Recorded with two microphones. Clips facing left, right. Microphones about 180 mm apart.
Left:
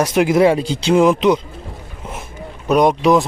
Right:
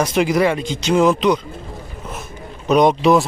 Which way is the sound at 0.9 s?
15° left (ahead or behind).